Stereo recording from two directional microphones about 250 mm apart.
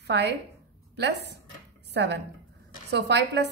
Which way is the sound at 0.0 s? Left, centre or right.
Right.